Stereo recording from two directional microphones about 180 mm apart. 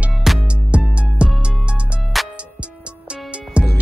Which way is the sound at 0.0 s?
Centre (ahead or behind).